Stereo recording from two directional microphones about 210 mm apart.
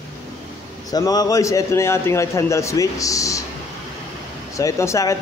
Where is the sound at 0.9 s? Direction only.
20° left (ahead or behind).